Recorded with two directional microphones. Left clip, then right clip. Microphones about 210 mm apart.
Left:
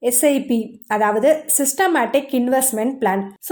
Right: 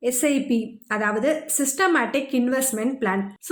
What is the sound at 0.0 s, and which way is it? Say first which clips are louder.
A woman's voice: left 5 dB; 20° left (ahead or behind).